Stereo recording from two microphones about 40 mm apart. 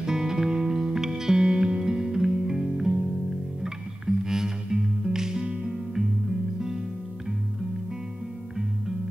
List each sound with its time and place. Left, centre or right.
0.0 s music: centre